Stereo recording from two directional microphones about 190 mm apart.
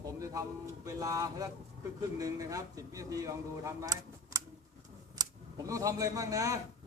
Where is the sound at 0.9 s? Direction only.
20° right (ahead or behind).